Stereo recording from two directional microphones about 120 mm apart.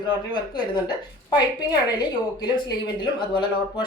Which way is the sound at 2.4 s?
40° left (ahead or behind).